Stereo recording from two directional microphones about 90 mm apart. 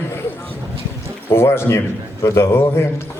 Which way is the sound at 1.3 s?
30° left (ahead or behind).